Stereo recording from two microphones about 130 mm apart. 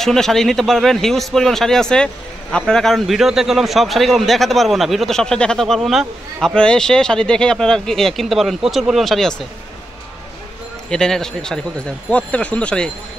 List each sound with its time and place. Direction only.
0.0 s a man's voice: 5° left (ahead or behind)
10.9 s speech: 5° left (ahead or behind)